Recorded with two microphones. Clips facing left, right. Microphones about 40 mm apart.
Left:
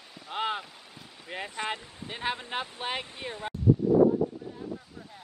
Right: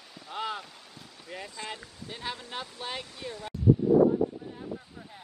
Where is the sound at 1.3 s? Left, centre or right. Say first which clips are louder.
Left 5 dB; left.